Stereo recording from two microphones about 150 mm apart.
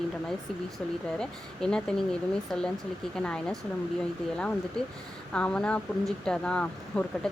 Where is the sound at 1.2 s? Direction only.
5° left (ahead or behind).